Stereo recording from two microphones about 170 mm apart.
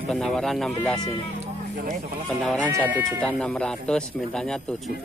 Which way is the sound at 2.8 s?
10° left (ahead or behind).